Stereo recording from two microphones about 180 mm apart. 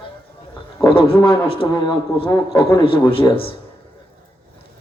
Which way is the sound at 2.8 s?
30° left (ahead or behind).